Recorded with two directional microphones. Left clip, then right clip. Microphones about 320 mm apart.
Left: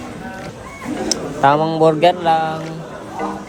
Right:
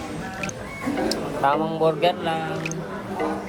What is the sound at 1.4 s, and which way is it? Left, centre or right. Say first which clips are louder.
Mantra: left 8 dB; left.